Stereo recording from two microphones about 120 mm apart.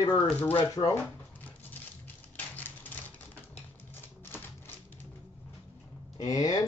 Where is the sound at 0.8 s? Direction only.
20° left (ahead or behind).